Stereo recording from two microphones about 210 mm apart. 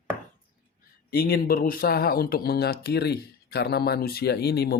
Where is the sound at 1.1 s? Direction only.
45° left (ahead or behind).